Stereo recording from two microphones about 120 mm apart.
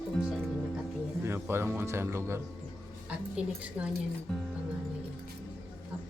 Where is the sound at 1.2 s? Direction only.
20° right (ahead or behind).